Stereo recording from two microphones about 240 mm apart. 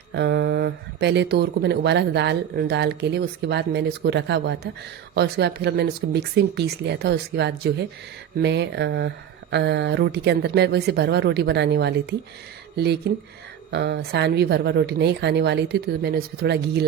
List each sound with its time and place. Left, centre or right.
0.1 s speech: right